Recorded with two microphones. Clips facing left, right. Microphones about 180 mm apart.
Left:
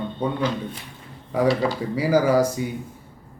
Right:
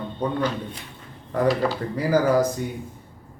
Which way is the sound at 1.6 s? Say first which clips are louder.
Left 1 dB; 10° left (ahead or behind).